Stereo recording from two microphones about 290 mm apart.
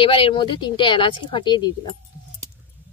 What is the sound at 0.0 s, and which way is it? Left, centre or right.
Speech, centre.